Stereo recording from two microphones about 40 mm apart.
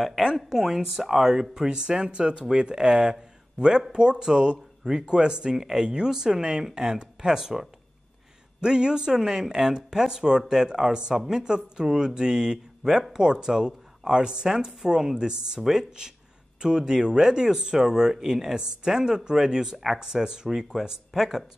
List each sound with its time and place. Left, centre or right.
0.4 s speech: centre
1.7 s speech: right
5.6 s speech: centre